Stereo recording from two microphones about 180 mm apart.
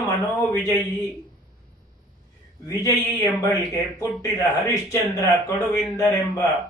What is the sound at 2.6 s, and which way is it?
A man's voice, 15° left (ahead or behind).